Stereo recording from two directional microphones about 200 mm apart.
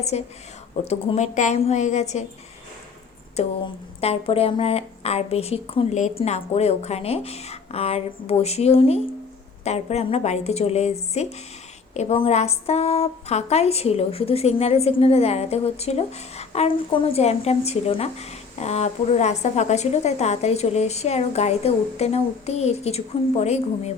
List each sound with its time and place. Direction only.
0.1 s a woman's voice: 35° left (ahead or behind)
3.4 s a woman's voice: 30° left (ahead or behind)